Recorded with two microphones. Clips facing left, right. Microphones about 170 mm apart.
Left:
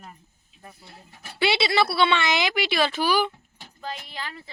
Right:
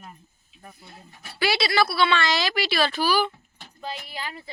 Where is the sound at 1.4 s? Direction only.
25° left (ahead or behind).